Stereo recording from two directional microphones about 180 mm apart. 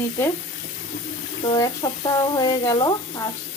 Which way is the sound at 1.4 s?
20° left (ahead or behind).